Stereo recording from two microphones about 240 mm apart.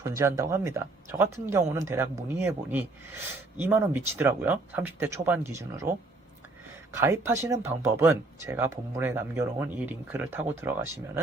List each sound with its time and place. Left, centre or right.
0.0 s speech: centre
6.9 s speech: centre